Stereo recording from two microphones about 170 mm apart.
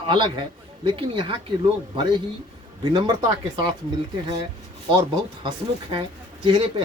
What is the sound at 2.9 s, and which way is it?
Speech, 25° right (ahead or behind).